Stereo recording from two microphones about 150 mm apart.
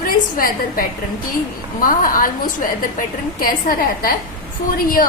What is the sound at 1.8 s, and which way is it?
A woman's voice, 70° left (ahead or behind).